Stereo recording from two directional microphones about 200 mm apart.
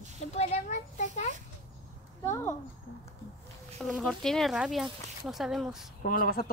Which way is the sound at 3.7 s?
Centre (ahead or behind).